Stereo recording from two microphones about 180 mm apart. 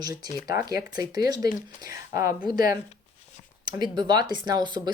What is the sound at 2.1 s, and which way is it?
Speech, 15° right (ahead or behind).